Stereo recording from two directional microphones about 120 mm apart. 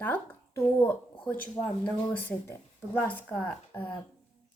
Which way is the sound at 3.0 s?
15° left (ahead or behind).